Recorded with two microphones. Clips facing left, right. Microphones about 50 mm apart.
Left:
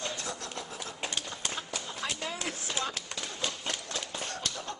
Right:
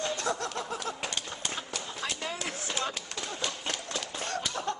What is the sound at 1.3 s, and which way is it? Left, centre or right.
Horse, centre.